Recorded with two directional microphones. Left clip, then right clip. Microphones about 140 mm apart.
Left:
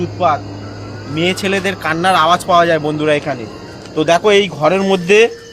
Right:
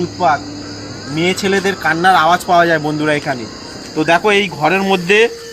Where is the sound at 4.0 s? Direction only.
90° left.